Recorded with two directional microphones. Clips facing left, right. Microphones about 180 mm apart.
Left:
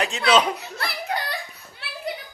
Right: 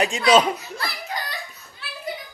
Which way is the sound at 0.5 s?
60° left (ahead or behind).